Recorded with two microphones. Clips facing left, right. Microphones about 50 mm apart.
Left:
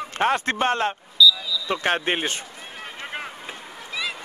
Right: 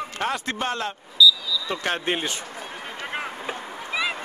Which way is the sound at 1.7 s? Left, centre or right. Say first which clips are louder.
Left 4 dB; left.